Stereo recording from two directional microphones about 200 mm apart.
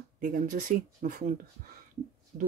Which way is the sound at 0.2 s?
40° right (ahead or behind).